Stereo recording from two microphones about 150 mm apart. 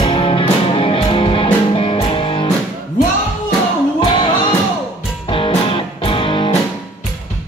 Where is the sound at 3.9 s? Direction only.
30° left (ahead or behind).